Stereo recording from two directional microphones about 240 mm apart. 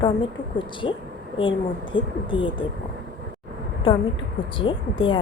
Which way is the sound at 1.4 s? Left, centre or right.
Left.